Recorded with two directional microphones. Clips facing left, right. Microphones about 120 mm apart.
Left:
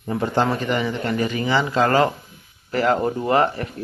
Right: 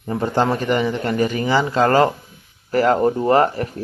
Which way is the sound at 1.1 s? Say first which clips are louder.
Right 2 dB; 40° right (ahead or behind).